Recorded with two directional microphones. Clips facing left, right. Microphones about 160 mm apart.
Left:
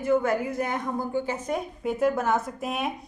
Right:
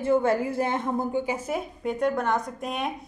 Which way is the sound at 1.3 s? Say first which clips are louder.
Even; 5° right (ahead or behind).